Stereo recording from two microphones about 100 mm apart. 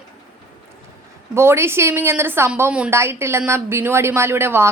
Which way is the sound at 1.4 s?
25° right (ahead or behind).